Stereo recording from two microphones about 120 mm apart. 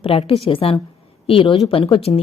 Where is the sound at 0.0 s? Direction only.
50° left (ahead or behind).